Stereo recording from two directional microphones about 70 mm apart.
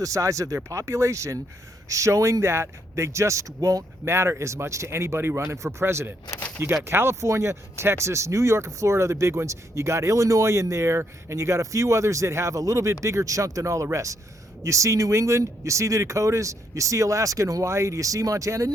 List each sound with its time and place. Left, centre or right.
0.0 s speech: right
4.0 s speech: right